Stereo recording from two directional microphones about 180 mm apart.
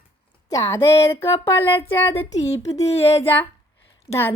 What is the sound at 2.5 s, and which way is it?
Speech, 20° left (ahead or behind).